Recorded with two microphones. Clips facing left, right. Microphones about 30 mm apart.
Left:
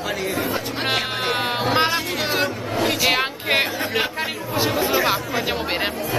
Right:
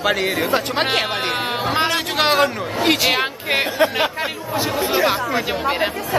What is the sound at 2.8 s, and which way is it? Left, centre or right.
Speech, right.